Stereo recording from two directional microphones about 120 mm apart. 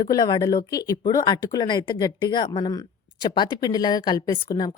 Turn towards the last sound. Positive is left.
turn(degrees=35)  # may be behind; listen again after turning